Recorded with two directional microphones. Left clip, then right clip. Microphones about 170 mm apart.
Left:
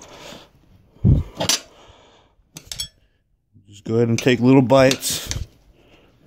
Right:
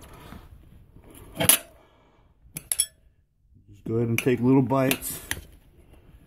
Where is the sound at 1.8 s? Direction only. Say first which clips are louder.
Left 10 dB; 80° left.